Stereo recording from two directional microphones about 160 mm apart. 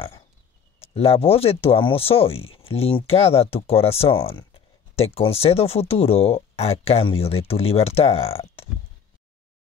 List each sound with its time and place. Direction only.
0.7 s speech: 40° left (ahead or behind)